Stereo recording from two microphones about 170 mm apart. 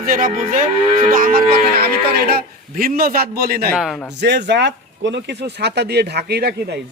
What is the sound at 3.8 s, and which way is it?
Speech, centre (ahead or behind).